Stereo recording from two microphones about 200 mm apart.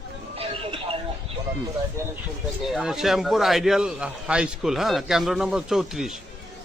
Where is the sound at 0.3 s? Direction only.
30° right (ahead or behind).